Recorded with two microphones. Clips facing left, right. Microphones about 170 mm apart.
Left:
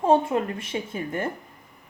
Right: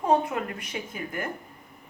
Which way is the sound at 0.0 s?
25° left (ahead or behind).